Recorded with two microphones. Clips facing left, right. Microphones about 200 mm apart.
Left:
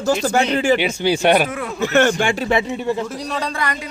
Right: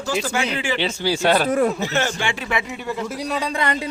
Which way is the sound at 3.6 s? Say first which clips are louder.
Right 2 dB; 25° right (ahead or behind).